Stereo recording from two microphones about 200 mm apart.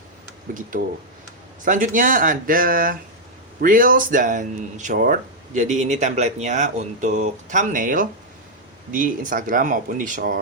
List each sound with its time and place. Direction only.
0.5 s speech: 45° right (ahead or behind)